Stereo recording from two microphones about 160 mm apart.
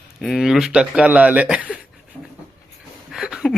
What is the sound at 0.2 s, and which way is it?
Speech, centre (ahead or behind).